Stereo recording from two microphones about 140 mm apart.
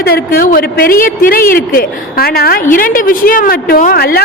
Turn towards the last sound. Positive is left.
turn(degrees=90)